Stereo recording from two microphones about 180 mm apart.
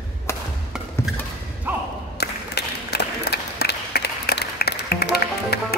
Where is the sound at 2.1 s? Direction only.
65° left (ahead or behind).